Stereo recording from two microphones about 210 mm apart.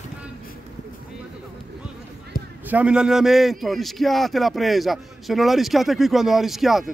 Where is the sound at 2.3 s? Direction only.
45° left (ahead or behind).